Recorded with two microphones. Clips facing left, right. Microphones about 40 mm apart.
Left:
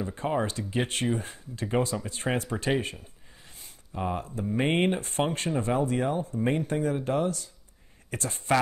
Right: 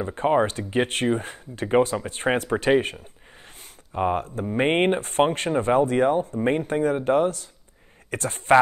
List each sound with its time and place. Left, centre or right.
0.0 s speech: right
3.9 s speech: right